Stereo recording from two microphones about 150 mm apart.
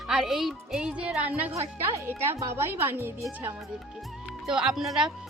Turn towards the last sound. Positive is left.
turn(degrees=0)  # may be behind; listen again after turning